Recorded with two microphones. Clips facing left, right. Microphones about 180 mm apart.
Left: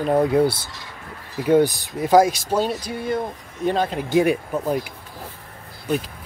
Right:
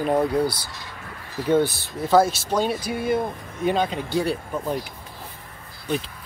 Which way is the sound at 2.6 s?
10° right (ahead or behind).